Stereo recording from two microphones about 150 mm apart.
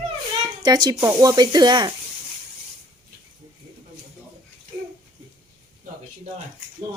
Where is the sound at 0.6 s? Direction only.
30° right (ahead or behind).